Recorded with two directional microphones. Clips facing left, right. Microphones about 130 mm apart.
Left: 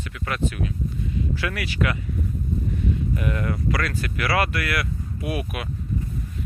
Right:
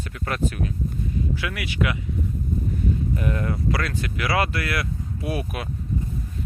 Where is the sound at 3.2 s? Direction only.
30° right (ahead or behind).